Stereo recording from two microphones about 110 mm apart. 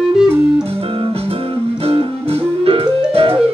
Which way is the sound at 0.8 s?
55° right (ahead or behind).